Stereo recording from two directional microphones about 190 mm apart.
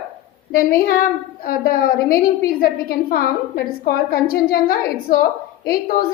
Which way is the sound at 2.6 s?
55° left (ahead or behind).